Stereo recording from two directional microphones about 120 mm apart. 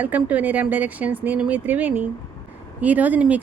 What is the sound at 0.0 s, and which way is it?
Speech, 10° right (ahead or behind).